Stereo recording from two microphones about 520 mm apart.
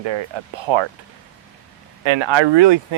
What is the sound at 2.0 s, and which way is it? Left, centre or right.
Speech, right.